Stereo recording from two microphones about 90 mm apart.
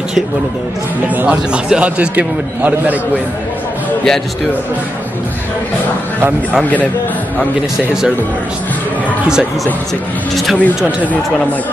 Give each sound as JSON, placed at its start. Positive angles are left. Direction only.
{"t": 1.0, "sound": "a man's voice", "side_deg": -20}
{"t": 6.6, "sound": "a man's voice", "side_deg": 15}
{"t": 10.3, "sound": "speech", "side_deg": 0}